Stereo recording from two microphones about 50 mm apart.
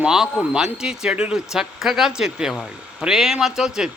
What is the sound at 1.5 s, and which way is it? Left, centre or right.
A man's voice, centre.